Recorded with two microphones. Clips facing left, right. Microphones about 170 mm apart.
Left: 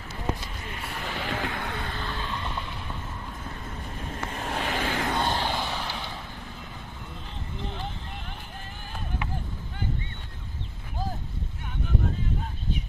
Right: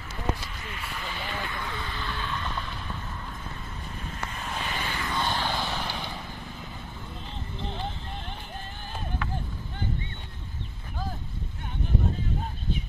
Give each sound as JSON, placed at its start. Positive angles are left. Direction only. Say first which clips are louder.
{"t": 0.7, "sound": "vehicle", "louder": "left 3 dB", "side_deg": 55}
{"t": 2.1, "sound": "vehicle", "louder": "even", "side_deg": 25}
{"t": 4.4, "sound": "vehicle", "louder": "left 5 dB", "side_deg": 70}
{"t": 5.3, "sound": "vehicle", "louder": "left 1 dB", "side_deg": 15}
{"t": 5.7, "sound": "vehicle", "louder": "even", "side_deg": 0}